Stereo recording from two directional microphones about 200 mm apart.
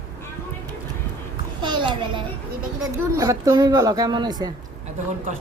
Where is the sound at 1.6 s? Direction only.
25° right (ahead or behind).